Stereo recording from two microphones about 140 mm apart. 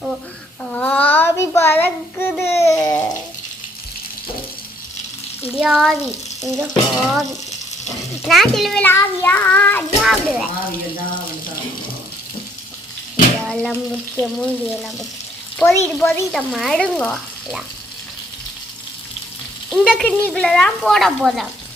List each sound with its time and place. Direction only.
0.6 s child singing: 10° left (ahead or behind)
2.4 s water: 20° left (ahead or behind)
5.5 s speech: 5° right (ahead or behind)
6.4 s frying: 25° right (ahead or behind)
6.7 s a child's voice: centre (ahead or behind)
8.8 s child singing: 15° left (ahead or behind)
10.0 s speech: 5° right (ahead or behind)
13.5 s frying: 5° left (ahead or behind)
14.2 s speech: 5° left (ahead or behind)
15.6 s child singing: 20° left (ahead or behind)
16.3 s speech: centre (ahead or behind)
19.7 s speech: 5° left (ahead or behind)